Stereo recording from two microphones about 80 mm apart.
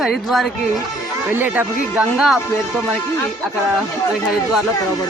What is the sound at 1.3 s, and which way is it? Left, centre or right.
Speech, right.